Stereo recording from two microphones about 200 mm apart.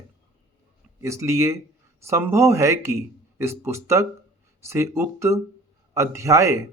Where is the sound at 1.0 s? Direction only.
15° right (ahead or behind).